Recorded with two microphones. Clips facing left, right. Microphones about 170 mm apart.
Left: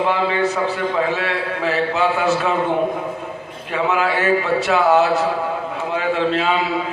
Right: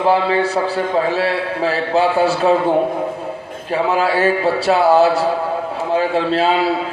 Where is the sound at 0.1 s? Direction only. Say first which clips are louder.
Right 4 dB; 35° right (ahead or behind).